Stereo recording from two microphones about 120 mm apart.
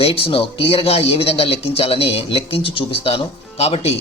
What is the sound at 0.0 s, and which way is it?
Speech, 50° left (ahead or behind).